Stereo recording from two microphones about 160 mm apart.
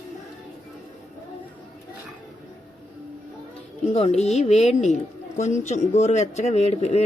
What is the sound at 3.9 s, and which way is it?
A woman's voice, 40° left (ahead or behind).